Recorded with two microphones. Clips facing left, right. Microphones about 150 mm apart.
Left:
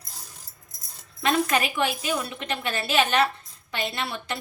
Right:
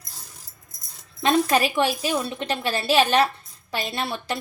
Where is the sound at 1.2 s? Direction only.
35° right (ahead or behind).